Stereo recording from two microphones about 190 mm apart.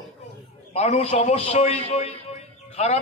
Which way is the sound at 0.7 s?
35° left (ahead or behind).